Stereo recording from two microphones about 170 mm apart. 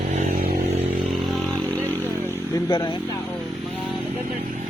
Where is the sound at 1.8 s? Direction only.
15° right (ahead or behind).